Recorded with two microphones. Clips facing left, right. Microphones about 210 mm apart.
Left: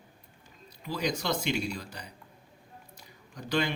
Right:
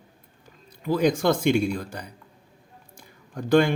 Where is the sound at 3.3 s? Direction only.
50° right (ahead or behind).